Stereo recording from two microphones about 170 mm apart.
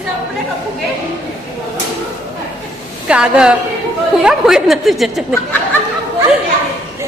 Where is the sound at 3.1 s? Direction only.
5° right (ahead or behind).